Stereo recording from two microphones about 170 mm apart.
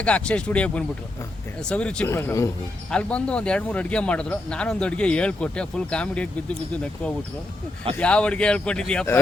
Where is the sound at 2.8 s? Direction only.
5° left (ahead or behind).